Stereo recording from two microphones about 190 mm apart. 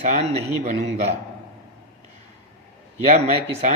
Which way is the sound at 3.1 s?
35° right (ahead or behind).